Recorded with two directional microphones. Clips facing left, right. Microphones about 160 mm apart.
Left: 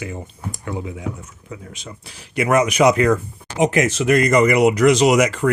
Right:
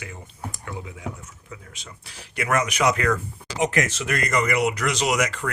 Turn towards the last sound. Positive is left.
turn(degrees=10)  # may be behind; listen again after turning